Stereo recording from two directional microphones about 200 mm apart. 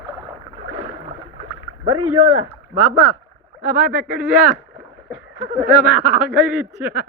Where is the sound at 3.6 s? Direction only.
40° right (ahead or behind).